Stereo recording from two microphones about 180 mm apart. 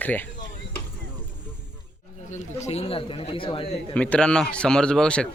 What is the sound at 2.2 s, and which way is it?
Speech, 40° left (ahead or behind).